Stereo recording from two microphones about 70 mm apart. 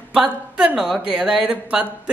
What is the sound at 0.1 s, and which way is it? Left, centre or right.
A woman's voice, centre.